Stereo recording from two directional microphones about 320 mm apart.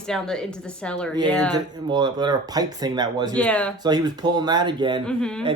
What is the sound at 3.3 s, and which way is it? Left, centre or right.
Speech, centre.